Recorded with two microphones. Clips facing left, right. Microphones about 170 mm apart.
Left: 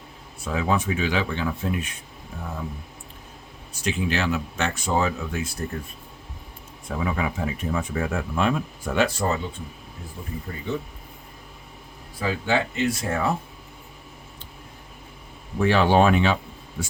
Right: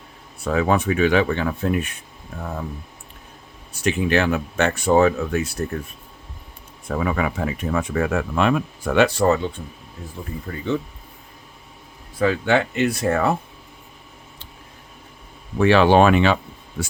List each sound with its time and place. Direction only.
0.4 s speech: 65° right (ahead or behind)
3.8 s speech: 60° right (ahead or behind)
6.8 s speech: 65° right (ahead or behind)
12.2 s speech: 70° right (ahead or behind)
15.5 s speech: 75° right (ahead or behind)